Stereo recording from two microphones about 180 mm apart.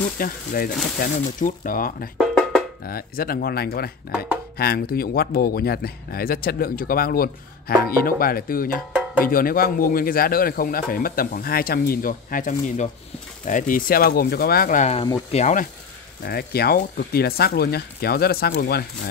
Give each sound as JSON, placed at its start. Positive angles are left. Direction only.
{"t": 0.2, "sound": "a man's voice", "side_deg": 50}
{"t": 2.1, "sound": "music", "side_deg": 5}
{"t": 2.8, "sound": "a man's voice", "side_deg": 55}
{"t": 16.3, "sound": "speech", "side_deg": 60}